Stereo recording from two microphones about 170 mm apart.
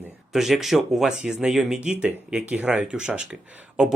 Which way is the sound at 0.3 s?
Centre (ahead or behind).